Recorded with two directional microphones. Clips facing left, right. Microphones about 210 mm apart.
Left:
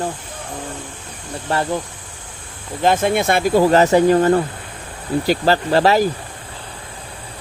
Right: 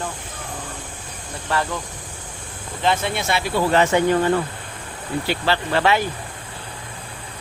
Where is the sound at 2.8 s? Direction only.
50° left (ahead or behind).